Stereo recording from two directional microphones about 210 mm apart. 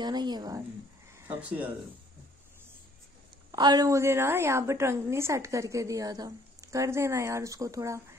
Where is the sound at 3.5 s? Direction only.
20° right (ahead or behind).